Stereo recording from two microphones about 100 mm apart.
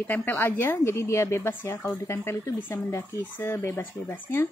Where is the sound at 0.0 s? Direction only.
15° left (ahead or behind).